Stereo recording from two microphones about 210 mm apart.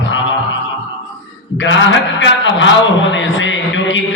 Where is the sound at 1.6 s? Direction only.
60° left (ahead or behind).